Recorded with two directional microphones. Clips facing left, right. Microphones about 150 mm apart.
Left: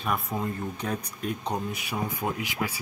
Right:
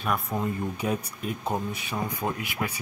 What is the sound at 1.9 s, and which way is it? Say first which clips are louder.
Speech: even; 10° left (ahead or behind).